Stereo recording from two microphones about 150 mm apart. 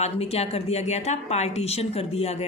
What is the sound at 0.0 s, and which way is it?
A woman's voice, 45° left (ahead or behind).